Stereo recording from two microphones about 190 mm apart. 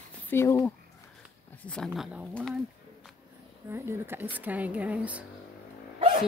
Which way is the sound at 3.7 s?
10° right (ahead or behind).